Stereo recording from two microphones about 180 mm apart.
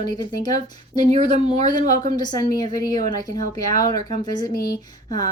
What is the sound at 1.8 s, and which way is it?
Speech, 45° right (ahead or behind).